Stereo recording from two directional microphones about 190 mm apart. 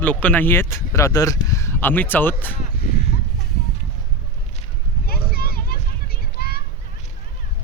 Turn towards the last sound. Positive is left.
turn(degrees=55)  # may be behind; listen again after turning